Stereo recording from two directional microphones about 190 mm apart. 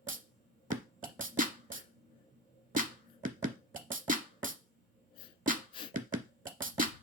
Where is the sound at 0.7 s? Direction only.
45° right (ahead or behind).